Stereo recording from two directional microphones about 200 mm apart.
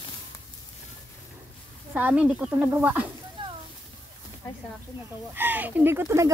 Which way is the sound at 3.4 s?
25° right (ahead or behind).